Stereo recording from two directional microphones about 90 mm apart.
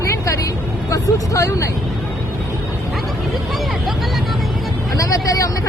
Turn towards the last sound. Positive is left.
turn(degrees=40)  # may be behind; listen again after turning